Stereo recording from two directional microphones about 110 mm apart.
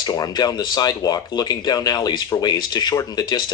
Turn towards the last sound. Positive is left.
turn(degrees=40)  # may be behind; listen again after turning